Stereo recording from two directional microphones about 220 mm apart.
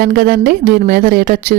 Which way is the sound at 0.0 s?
45° right (ahead or behind).